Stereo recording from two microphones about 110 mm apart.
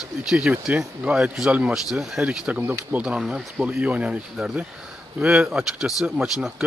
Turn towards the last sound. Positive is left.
turn(degrees=-5)  # may be behind; listen again after turning